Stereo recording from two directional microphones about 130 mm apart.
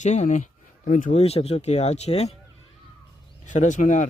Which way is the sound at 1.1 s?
50° left (ahead or behind).